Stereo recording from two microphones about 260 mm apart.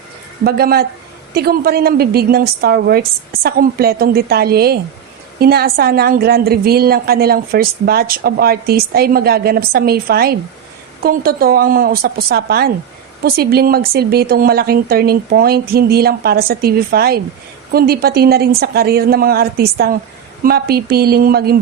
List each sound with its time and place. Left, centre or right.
0.4 s a woman's voice: right